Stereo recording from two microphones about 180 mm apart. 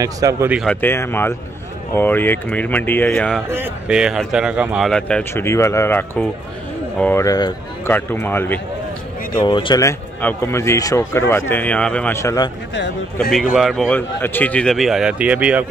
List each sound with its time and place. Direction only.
0.0 s speech: 20° right (ahead or behind)
0.5 s speech: centre (ahead or behind)
0.7 s speech: 15° left (ahead or behind)
3.4 s speech: 10° right (ahead or behind); by 8.5 s 10° left (ahead or behind)
9.3 s speech: 25° left (ahead or behind)
12.7 s speech: 70° left (ahead or behind)
13.6 s speech: centre (ahead or behind)